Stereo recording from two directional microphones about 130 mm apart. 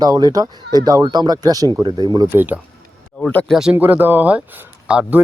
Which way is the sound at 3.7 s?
15° right (ahead or behind).